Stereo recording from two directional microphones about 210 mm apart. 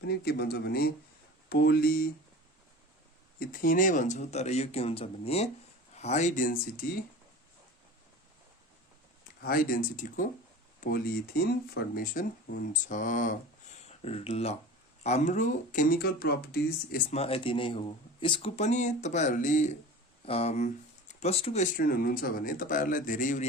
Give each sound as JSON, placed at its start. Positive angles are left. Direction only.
{"t": 0.1, "sound": "speech", "side_deg": 50}
{"t": 3.4, "sound": "speech", "side_deg": 40}
{"t": 9.4, "sound": "speech", "side_deg": 45}
{"t": 17.2, "sound": "speech", "side_deg": 25}
{"t": 21.8, "sound": "speech", "side_deg": 45}